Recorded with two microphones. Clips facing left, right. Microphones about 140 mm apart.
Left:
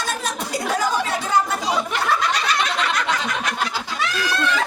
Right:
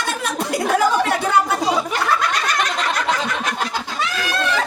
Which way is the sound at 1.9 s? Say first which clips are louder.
Right 1 dB; 45° right (ahead or behind).